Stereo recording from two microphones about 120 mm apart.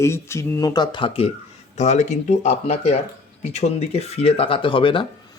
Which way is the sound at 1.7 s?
75° left (ahead or behind).